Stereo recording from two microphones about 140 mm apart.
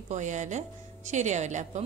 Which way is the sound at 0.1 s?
60° right (ahead or behind).